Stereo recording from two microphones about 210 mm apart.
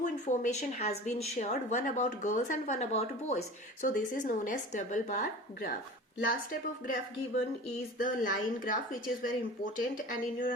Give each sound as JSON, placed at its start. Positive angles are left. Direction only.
{"t": 0.0, "sound": "a woman's voice", "side_deg": 35}
{"t": 7.9, "sound": "speech", "side_deg": 40}